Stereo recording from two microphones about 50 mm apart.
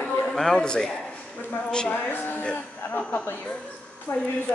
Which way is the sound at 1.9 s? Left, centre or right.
Left.